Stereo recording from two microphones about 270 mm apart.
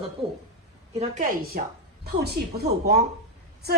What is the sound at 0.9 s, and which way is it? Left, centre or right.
A woman's voice, right.